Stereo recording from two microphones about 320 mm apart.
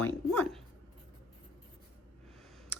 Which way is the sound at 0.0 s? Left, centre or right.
Centre.